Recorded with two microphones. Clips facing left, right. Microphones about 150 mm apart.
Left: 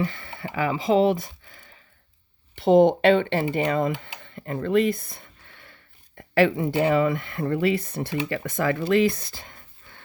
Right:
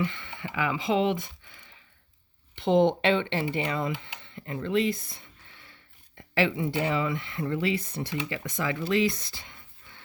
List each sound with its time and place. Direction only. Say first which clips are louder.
0.0 s speech: left 3 dB; 40° left (ahead or behind)